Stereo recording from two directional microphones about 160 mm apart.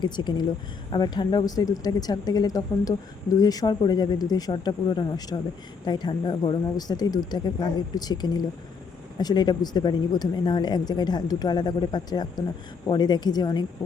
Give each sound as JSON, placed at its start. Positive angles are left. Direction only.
{"t": 0.0, "sound": "speech", "side_deg": 30}